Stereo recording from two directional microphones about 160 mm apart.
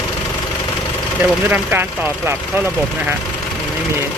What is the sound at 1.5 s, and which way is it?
Speech, 10° right (ahead or behind).